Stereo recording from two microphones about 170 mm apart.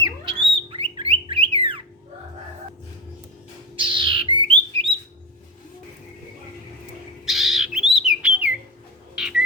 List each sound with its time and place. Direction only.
0.0 s bird: 30° right (ahead or behind)
3.8 s bird: 30° right (ahead or behind)
7.3 s bird: centre (ahead or behind)